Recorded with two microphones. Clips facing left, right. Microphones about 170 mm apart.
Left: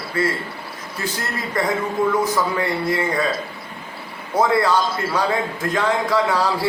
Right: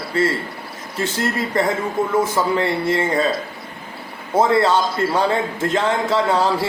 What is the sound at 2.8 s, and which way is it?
Speech, 25° right (ahead or behind).